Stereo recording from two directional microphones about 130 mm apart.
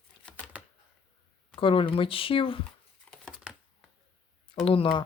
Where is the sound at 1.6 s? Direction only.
40° left (ahead or behind).